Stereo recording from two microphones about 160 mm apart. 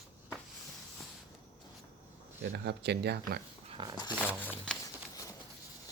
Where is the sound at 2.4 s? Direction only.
90° right.